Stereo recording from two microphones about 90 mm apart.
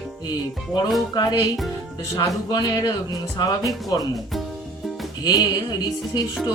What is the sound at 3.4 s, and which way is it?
Speech, 45° left (ahead or behind).